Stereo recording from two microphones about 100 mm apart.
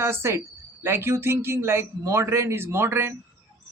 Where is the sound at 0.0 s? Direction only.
25° right (ahead or behind).